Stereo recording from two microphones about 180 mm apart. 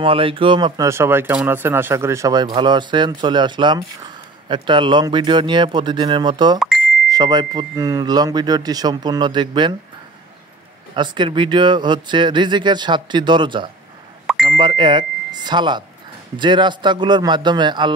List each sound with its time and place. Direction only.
0.0 s speech: 30° right (ahead or behind)
11.0 s speech: 25° right (ahead or behind)
14.2 s beep: centre (ahead or behind)
14.6 s speech: 25° right (ahead or behind)